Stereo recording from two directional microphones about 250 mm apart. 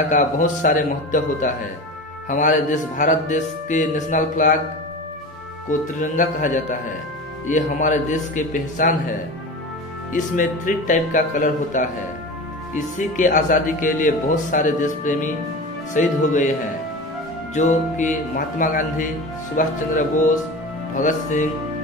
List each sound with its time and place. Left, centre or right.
0.1 s speech: left
5.7 s speech: left
10.1 s speech: left
17.6 s speech: left